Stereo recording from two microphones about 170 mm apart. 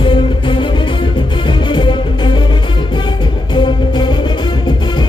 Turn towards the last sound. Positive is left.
turn(degrees=25)  # may be behind; listen again after turning